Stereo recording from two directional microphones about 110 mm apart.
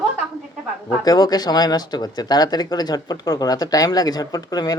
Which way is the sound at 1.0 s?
35° left (ahead or behind).